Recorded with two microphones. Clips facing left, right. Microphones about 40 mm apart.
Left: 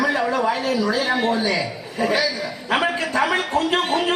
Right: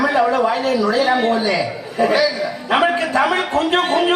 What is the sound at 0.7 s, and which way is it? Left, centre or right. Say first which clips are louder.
A man's voice: right 5 dB; centre.